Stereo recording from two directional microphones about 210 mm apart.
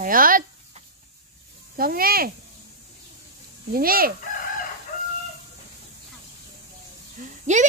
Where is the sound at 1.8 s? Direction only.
45° right (ahead or behind).